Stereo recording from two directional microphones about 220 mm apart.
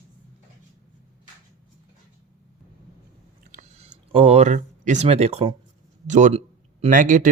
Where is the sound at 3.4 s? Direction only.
35° right (ahead or behind).